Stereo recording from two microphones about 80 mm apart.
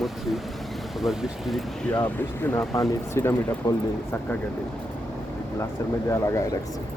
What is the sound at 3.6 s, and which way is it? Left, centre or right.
Speech, left.